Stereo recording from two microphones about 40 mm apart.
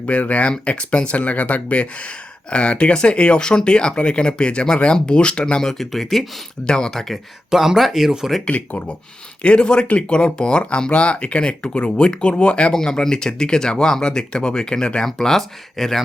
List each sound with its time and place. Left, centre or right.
0.0 s speech: left; by 6.2 s centre
6.7 s speech: centre
7.5 s speech: centre
8.4 s speech: left
12.7 s speech: centre